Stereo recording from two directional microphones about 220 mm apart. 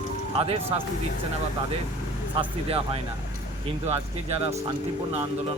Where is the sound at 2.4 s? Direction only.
25° right (ahead or behind).